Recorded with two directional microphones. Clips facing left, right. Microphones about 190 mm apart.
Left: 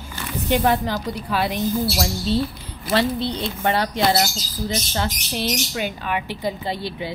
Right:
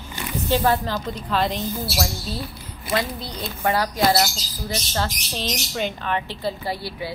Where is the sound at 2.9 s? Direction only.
30° left (ahead or behind).